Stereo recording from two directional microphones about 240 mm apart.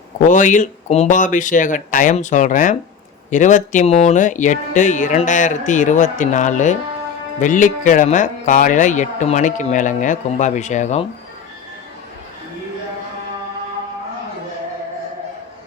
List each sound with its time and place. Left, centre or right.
0.2 s speech: left